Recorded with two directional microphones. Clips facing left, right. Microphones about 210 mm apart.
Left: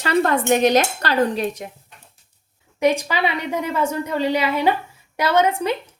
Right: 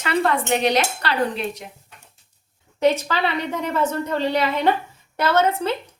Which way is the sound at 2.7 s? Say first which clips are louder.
Even; 15° left (ahead or behind).